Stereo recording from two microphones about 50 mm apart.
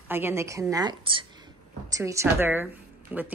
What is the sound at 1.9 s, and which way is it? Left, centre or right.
Speech, right.